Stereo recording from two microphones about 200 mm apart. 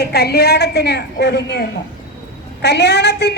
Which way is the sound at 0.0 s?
50° left (ahead or behind).